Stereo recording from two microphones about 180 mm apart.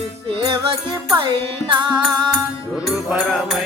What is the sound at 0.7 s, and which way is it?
Music, 30° right (ahead or behind).